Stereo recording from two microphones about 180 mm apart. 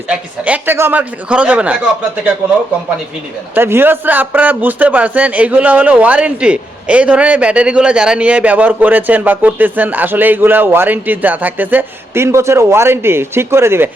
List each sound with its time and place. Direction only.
0.1 s a man's voice: 5° right (ahead or behind)
3.5 s a man's voice: 10° right (ahead or behind)